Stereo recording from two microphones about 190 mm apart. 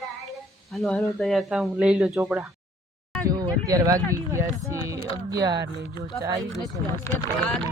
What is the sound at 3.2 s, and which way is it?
Speech, 20° right (ahead or behind).